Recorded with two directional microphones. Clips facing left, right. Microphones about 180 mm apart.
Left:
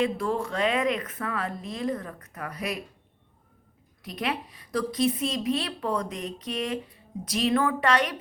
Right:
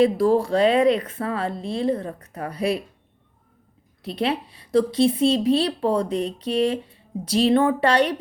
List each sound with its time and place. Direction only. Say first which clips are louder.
0.0 s a woman's voice: right 9 dB; 35° right (ahead or behind)
4.0 s speech: right 7 dB; 30° right (ahead or behind)